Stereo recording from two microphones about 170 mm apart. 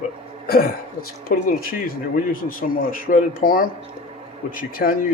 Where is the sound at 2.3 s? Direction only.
55° left (ahead or behind).